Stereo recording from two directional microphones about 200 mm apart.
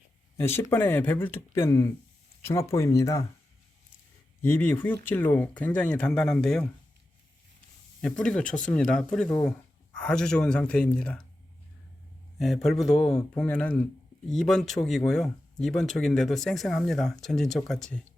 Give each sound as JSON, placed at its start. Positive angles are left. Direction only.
{"t": 0.3, "sound": "speech", "side_deg": 10}
{"t": 4.4, "sound": "speech", "side_deg": 10}
{"t": 8.0, "sound": "speech", "side_deg": 5}
{"t": 12.8, "sound": "speech", "side_deg": 0}